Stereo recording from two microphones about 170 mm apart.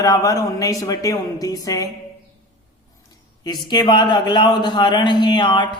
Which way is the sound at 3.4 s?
25° left (ahead or behind).